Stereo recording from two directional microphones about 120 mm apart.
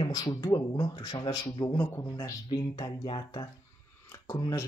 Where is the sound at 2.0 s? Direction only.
30° left (ahead or behind).